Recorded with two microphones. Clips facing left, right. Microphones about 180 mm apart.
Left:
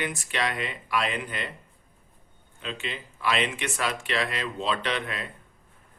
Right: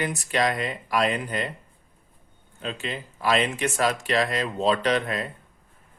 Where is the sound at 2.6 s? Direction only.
40° right (ahead or behind).